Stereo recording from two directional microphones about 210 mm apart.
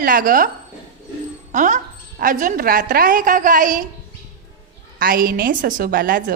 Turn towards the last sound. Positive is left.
turn(degrees=-45)  # may be behind; listen again after turning